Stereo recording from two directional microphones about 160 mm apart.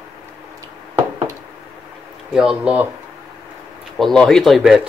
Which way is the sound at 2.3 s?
5° right (ahead or behind).